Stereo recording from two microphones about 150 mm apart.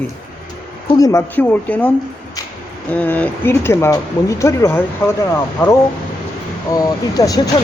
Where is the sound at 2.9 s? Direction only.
10° left (ahead or behind).